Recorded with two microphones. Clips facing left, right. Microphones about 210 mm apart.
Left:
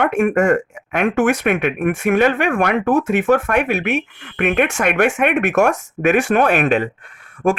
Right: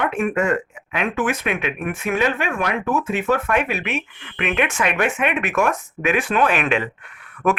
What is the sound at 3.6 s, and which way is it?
Speech, 75° left (ahead or behind).